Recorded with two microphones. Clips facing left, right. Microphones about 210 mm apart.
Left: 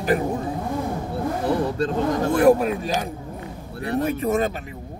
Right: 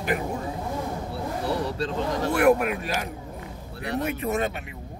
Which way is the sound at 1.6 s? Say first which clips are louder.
Left 5 dB; 50° left (ahead or behind).